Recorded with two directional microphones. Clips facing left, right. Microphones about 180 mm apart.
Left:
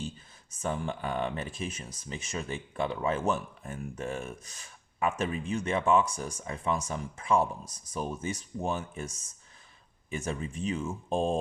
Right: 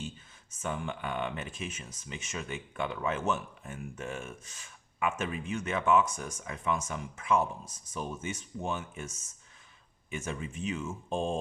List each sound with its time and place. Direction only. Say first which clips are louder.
0.6 s speech: left 3 dB; 35° left (ahead or behind)